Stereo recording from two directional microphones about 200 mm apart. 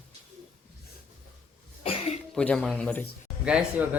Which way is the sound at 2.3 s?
5° left (ahead or behind).